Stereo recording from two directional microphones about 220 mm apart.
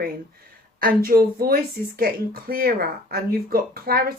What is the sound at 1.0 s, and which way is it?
Speech, 40° right (ahead or behind).